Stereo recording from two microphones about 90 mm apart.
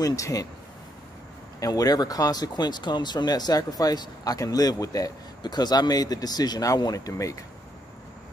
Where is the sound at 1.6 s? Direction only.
45° left (ahead or behind).